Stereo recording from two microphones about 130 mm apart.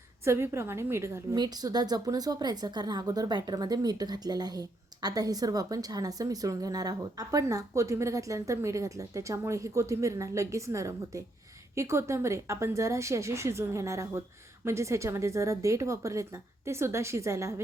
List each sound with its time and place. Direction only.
0.3 s a woman's voice: 20° right (ahead or behind)